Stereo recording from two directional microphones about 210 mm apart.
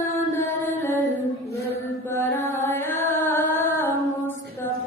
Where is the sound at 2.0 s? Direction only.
10° left (ahead or behind).